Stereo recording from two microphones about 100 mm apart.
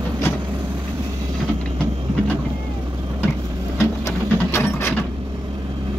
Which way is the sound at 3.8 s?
25° left (ahead or behind).